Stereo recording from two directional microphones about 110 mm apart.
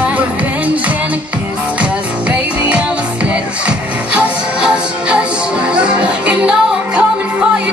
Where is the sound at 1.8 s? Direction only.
10° right (ahead or behind).